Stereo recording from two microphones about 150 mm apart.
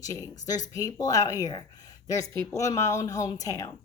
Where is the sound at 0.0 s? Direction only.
25° left (ahead or behind).